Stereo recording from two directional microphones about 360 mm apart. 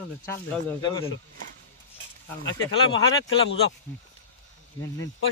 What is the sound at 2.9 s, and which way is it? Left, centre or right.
Speech, left.